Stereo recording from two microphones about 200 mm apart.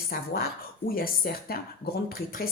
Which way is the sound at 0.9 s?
50° left (ahead or behind).